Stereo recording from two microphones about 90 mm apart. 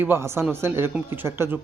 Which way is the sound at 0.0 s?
25° right (ahead or behind).